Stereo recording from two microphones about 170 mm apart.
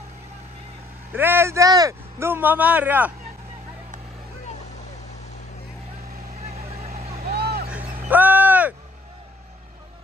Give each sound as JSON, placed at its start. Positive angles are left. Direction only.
{"t": 1.1, "sound": "a man's voice", "side_deg": -15}
{"t": 6.4, "sound": "vehicle", "side_deg": -40}
{"t": 7.2, "sound": "vehicle", "side_deg": -65}
{"t": 8.1, "sound": "a sound", "side_deg": -10}